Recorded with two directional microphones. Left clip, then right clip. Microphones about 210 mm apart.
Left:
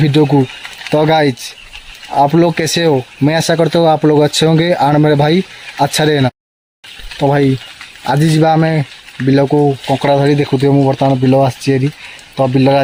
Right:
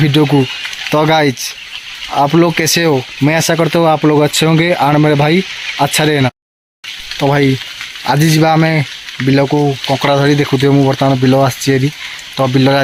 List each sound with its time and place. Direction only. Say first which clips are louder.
0.0 s speech: even; 5° left (ahead or behind)